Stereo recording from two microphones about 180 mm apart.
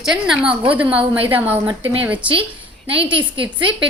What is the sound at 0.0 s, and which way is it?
Speech, 5° right (ahead or behind).